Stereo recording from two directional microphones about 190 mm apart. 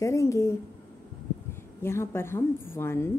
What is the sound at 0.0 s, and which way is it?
A woman's voice, 15° left (ahead or behind).